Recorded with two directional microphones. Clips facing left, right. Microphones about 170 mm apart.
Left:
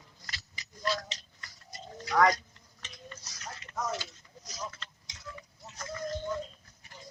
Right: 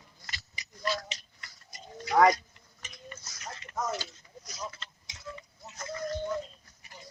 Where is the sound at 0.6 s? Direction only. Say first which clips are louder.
Right 2 dB; 20° right (ahead or behind).